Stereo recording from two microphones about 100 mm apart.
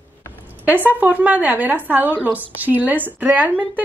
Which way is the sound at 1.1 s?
15° right (ahead or behind).